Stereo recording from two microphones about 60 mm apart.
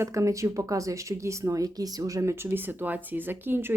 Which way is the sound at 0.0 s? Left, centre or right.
Right.